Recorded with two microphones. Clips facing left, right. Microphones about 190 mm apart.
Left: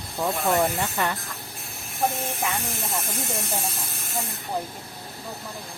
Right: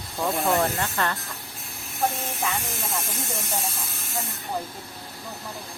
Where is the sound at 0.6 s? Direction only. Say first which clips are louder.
Left 1 dB; 10° left (ahead or behind).